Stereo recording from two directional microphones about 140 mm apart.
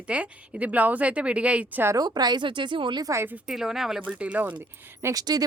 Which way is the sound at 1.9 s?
30° right (ahead or behind).